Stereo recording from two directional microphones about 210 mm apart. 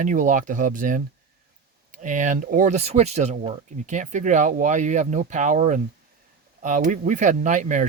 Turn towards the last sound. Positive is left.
turn(degrees=-35)  # may be behind; listen again after turning